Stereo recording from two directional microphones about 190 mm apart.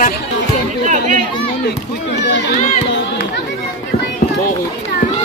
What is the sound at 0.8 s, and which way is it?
Speech, 40° right (ahead or behind).